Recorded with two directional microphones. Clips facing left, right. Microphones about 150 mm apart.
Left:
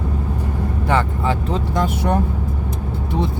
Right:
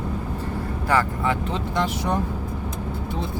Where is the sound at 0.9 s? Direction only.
30° left (ahead or behind).